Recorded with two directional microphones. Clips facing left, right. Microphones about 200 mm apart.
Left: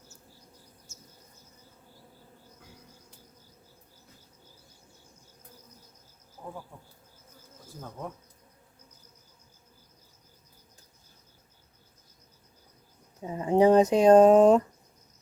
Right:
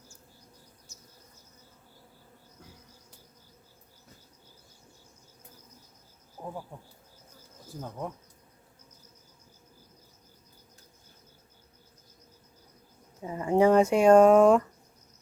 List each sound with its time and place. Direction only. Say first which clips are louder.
6.4 s insect: right 2 dB; 25° right (ahead or behind)
13.2 s speech: left 1 dB; 20° left (ahead or behind)